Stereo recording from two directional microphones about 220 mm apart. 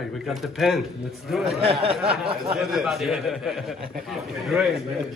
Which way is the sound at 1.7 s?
25° right (ahead or behind).